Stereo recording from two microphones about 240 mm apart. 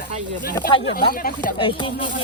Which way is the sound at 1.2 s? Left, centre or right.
Left.